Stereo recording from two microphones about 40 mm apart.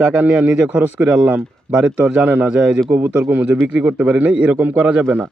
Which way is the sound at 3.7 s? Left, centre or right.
Right.